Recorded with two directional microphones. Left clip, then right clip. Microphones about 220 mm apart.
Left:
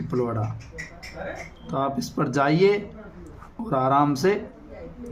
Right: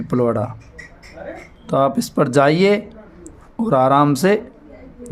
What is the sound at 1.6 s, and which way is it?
Speech, 50° right (ahead or behind).